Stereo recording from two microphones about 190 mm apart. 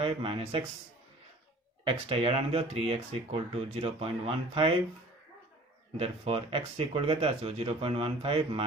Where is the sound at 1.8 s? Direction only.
30° right (ahead or behind).